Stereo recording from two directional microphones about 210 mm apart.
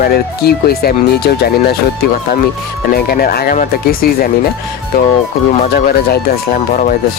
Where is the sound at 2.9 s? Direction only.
45° left (ahead or behind).